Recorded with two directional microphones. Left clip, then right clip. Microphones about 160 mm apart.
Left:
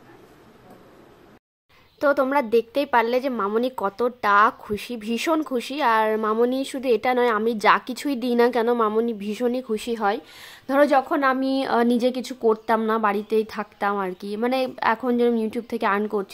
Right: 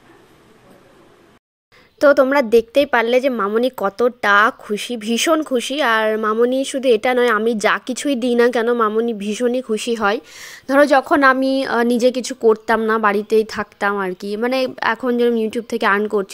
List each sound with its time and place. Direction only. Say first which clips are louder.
2.0 s a woman's voice: right 8 dB; 25° right (ahead or behind)
11.3 s a woman's voice: right 4 dB; 15° right (ahead or behind)